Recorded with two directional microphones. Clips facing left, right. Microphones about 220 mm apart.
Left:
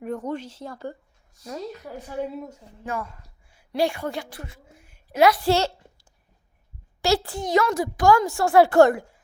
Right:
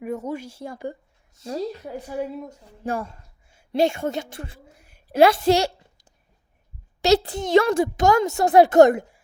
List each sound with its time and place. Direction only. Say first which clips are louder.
0.0 s speech: right 1 dB; 10° right (ahead or behind)
1.4 s a woman's voice: right 5 dB; 30° right (ahead or behind)
3.5 s a sound: right 3 dB; 25° right (ahead or behind)
7.0 s a woman's voice: right 4 dB; 20° right (ahead or behind)